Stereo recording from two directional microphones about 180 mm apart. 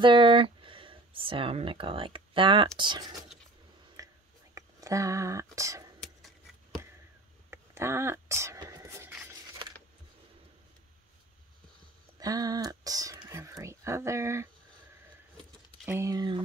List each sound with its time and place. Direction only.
0.0 s speech: 25° right (ahead or behind)
4.0 s whispering: 20° right (ahead or behind)
4.6 s speech: 15° right (ahead or behind)
6.0 s a sound: centre (ahead or behind)
7.5 s a sound: 15° right (ahead or behind)
12.2 s speech: 20° right (ahead or behind)
15.8 s speech: 15° right (ahead or behind)